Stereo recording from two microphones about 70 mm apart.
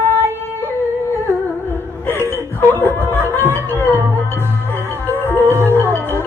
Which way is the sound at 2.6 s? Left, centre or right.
Left.